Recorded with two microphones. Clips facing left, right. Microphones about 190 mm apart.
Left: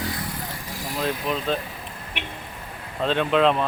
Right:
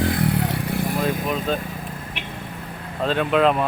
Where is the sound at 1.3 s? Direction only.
5° right (ahead or behind).